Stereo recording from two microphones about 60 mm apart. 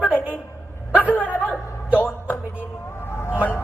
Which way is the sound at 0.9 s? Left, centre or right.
Left.